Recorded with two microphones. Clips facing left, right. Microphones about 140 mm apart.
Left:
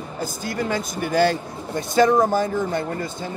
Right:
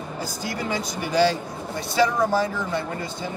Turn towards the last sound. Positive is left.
turn(degrees=50)  # may be behind; listen again after turning